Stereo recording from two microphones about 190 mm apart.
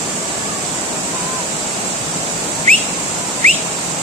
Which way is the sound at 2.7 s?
40° right (ahead or behind).